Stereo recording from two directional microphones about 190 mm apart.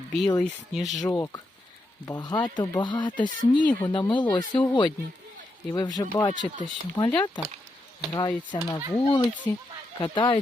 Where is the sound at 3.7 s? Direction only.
10° left (ahead or behind).